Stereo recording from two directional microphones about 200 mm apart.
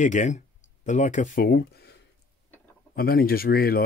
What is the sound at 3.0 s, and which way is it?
Speech, 50° left (ahead or behind).